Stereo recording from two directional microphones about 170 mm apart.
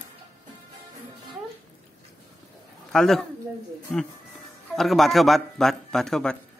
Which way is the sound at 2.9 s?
5° left (ahead or behind).